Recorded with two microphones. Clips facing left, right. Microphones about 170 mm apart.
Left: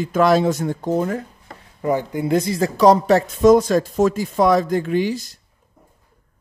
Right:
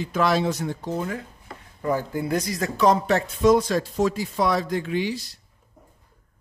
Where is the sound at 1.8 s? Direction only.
20° left (ahead or behind); by 5.3 s 45° left (ahead or behind).